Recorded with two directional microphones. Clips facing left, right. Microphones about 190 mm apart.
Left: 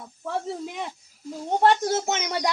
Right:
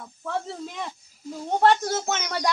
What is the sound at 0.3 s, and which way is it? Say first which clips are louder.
A woman's voice: left 1 dB; 15° left (ahead or behind).